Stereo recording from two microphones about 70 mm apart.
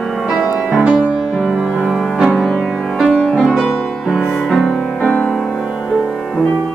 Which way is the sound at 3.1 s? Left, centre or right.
Centre.